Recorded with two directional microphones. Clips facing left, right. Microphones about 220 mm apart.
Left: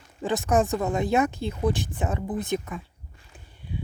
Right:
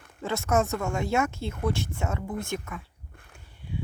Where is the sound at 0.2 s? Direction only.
15° left (ahead or behind).